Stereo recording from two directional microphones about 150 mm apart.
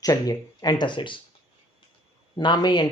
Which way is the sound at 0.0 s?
25° left (ahead or behind).